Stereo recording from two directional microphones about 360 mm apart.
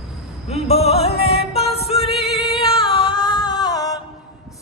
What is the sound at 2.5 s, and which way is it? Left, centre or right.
Singing, centre.